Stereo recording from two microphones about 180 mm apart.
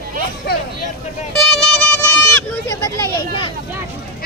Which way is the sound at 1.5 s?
5° left (ahead or behind).